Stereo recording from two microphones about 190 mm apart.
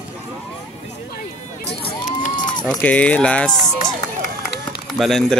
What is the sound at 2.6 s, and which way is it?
Speech, 5° left (ahead or behind).